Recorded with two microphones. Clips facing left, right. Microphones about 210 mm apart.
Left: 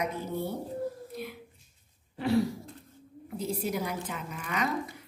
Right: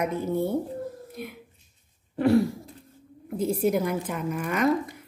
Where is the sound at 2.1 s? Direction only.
55° right (ahead or behind).